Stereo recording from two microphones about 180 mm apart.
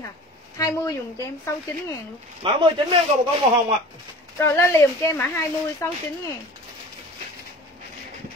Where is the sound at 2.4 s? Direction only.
30° right (ahead or behind).